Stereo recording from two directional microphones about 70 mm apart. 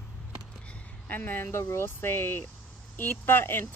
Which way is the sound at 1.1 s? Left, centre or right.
Left.